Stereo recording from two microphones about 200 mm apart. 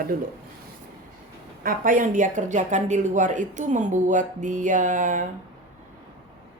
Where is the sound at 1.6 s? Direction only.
45° right (ahead or behind).